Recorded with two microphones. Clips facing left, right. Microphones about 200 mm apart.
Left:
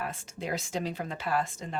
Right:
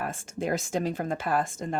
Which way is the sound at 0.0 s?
50° right (ahead or behind).